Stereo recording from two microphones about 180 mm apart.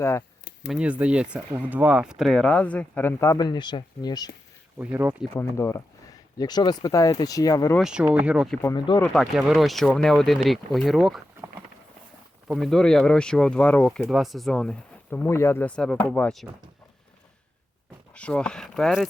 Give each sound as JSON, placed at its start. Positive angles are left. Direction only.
{"t": 0.0, "sound": "speech", "side_deg": 15}
{"t": 0.7, "sound": "speech", "side_deg": -5}
{"t": 4.8, "sound": "speech", "side_deg": -10}
{"t": 5.3, "sound": "speech", "side_deg": 10}
{"t": 7.8, "sound": "speech", "side_deg": -5}
{"t": 8.6, "sound": "speech", "side_deg": 25}
{"t": 9.1, "sound": "speech", "side_deg": 0}
{"t": 12.5, "sound": "speech", "side_deg": 0}
{"t": 18.1, "sound": "speech", "side_deg": 5}